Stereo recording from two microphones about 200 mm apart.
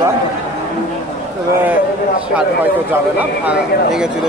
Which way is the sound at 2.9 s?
10° right (ahead or behind).